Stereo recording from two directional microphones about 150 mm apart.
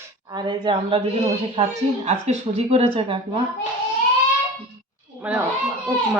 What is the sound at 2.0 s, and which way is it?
Speech, 45° right (ahead or behind).